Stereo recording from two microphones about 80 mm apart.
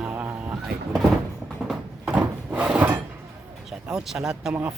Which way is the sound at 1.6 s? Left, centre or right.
Centre.